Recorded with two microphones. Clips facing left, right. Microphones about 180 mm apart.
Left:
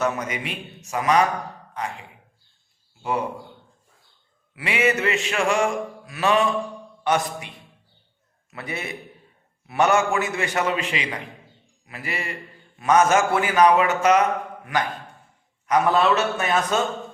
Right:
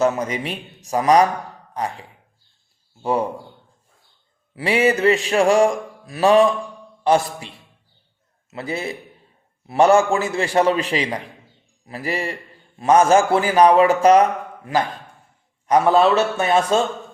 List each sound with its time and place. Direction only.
0.0 s a man's voice: 30° right (ahead or behind)
4.5 s a man's voice: 35° right (ahead or behind)